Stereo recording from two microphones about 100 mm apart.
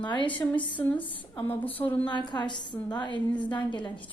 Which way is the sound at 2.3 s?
50° left (ahead or behind).